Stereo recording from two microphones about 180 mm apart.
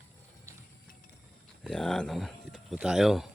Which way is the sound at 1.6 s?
5° left (ahead or behind).